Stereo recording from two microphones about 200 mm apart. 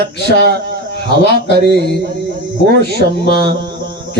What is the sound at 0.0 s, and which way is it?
Speech, 55° right (ahead or behind).